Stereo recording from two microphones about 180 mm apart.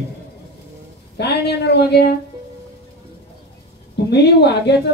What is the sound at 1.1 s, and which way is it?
Speech, 65° left (ahead or behind).